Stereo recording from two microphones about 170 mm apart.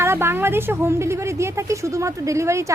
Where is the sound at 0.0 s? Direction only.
15° right (ahead or behind).